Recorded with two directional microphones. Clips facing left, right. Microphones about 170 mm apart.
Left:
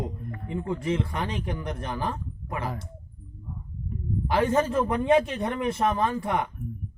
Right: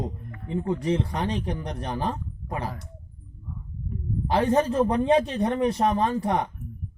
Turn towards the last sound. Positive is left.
turn(degrees=-35)  # may be behind; listen again after turning